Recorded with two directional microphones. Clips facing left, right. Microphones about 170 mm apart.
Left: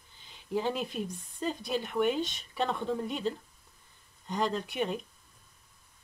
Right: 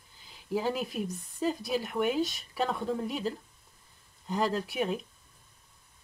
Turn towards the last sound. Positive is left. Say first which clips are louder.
# right 1 dB
turn(degrees=0)  # may be behind; listen again after turning